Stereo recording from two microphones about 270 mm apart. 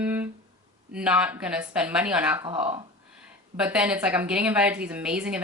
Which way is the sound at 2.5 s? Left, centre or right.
Centre.